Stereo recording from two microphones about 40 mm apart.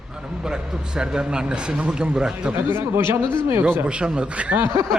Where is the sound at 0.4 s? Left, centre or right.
Centre.